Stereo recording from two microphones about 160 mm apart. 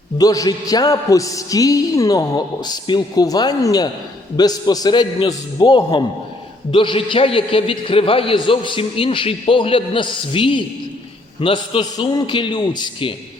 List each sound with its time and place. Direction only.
0.2 s a man's voice: 25° left (ahead or behind)